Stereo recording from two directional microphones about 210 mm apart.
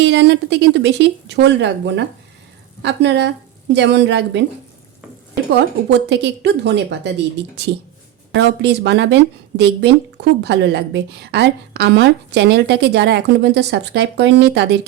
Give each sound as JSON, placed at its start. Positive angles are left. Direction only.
{"t": 0.0, "sound": "speech", "side_deg": -55}
{"t": 5.9, "sound": "a woman's voice", "side_deg": -55}